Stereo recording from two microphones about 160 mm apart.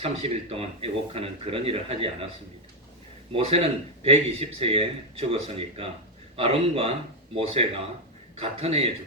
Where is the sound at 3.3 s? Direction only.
35° right (ahead or behind).